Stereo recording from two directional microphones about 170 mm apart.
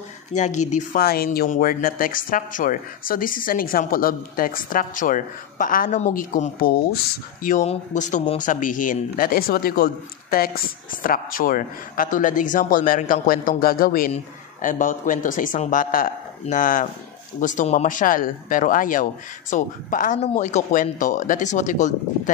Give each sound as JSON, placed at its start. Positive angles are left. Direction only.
{"t": 0.3, "sound": "speech", "side_deg": 45}
{"t": 1.0, "sound": "speech", "side_deg": 65}
{"t": 7.4, "sound": "speech", "side_deg": 45}